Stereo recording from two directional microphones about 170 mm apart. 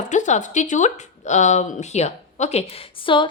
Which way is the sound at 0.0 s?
45° left (ahead or behind).